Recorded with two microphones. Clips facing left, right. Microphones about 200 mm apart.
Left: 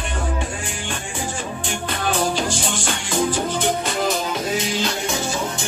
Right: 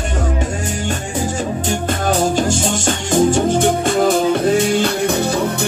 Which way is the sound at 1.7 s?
45° right (ahead or behind).